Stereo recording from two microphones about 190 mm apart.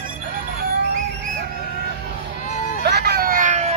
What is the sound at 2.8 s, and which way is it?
Vehicle, 55° right (ahead or behind).